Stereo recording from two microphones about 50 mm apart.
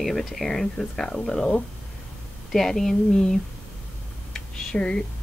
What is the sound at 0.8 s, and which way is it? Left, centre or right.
Speech, centre.